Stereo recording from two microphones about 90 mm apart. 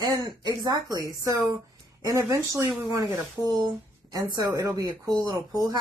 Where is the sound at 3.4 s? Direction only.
30° left (ahead or behind).